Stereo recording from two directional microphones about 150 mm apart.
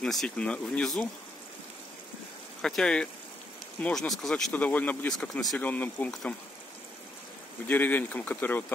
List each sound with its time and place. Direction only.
0.0 s speech: 5° left (ahead or behind)
2.6 s speech: 5° left (ahead or behind)
7.6 s speech: 10° left (ahead or behind)